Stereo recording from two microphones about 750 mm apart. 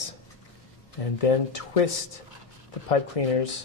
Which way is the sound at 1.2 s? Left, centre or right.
Left.